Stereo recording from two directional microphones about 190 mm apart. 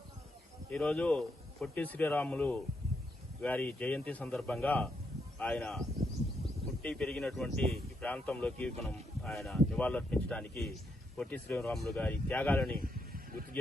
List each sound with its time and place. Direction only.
0.7 s speech: 5° left (ahead or behind)
6.8 s speech: 5° left (ahead or behind)
12.8 s a sound: 50° right (ahead or behind)